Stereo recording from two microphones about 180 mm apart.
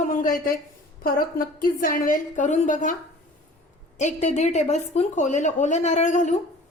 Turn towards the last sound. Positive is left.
turn(degrees=40)  # may be behind; listen again after turning